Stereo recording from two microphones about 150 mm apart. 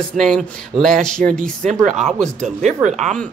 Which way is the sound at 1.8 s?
50° right (ahead or behind).